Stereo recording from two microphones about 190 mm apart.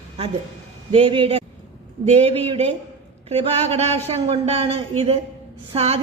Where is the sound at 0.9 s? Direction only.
30° right (ahead or behind).